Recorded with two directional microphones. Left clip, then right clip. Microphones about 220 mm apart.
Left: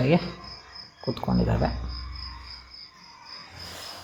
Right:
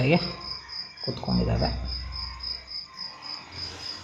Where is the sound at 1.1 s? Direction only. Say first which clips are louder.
Left 2 dB; 20° left (ahead or behind).